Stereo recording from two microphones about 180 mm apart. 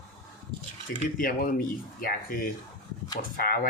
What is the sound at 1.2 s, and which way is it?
Speech, 50° left (ahead or behind).